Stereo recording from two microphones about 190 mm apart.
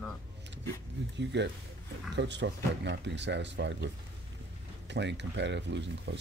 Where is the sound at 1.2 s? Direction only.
70° right (ahead or behind).